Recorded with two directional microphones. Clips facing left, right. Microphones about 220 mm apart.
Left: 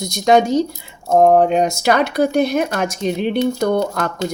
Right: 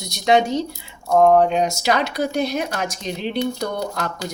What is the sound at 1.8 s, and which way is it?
A woman's voice, 55° left (ahead or behind).